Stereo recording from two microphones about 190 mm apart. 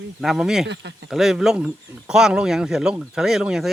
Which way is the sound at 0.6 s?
65° right (ahead or behind).